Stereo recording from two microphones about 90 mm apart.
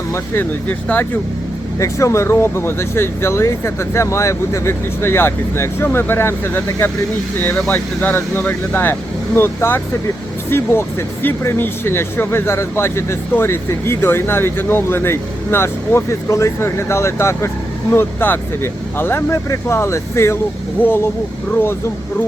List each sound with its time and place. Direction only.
0.7 s speech: 20° left (ahead or behind)
1.8 s speech: 35° left (ahead or behind)